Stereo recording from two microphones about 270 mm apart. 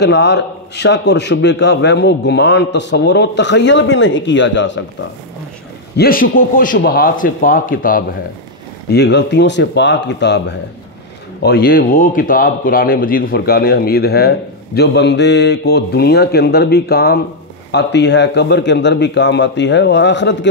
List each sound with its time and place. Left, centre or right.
0.0 s a man's voice: left
5.9 s a man's voice: left
11.4 s a man's voice: left